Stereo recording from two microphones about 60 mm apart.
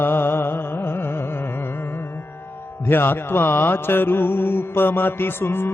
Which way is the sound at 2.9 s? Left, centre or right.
Left.